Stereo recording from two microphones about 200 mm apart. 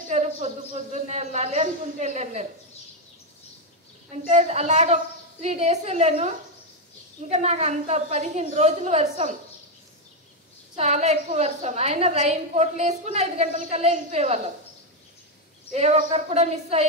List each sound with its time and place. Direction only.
0.1 s a woman's voice: 35° right (ahead or behind)
4.1 s a woman's voice: 35° right (ahead or behind)
10.8 s a woman's voice: 35° right (ahead or behind)
15.7 s a woman's voice: 35° right (ahead or behind)